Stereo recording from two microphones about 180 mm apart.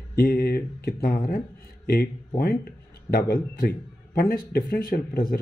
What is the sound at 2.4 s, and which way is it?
Speech, 60° left (ahead or behind).